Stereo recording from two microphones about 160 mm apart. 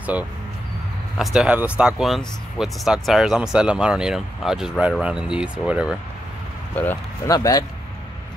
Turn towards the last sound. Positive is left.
turn(degrees=25)  # may be behind; listen again after turning